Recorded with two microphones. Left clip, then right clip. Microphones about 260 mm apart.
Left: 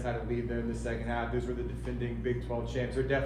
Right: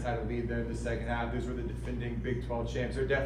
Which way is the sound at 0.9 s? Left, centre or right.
Left.